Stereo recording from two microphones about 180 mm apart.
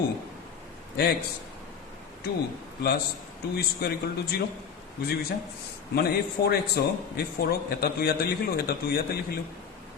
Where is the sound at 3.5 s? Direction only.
60° left (ahead or behind).